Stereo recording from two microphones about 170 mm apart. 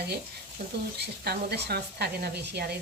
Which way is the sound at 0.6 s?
70° right (ahead or behind).